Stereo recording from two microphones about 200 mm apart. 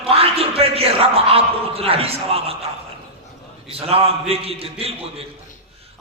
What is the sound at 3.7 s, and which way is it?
A man's voice, 30° right (ahead or behind).